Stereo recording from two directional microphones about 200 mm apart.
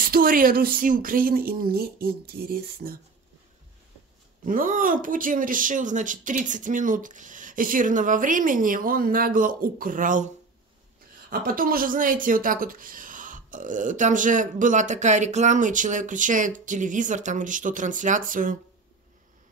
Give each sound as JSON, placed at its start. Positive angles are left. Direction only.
{"t": 0.0, "sound": "speech", "side_deg": -45}
{"t": 4.5, "sound": "speech", "side_deg": -45}